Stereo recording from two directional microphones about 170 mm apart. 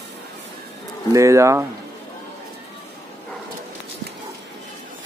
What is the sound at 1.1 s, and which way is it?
Speech, 20° right (ahead or behind).